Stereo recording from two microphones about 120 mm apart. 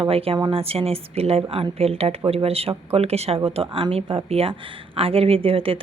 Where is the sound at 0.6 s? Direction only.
55° right (ahead or behind).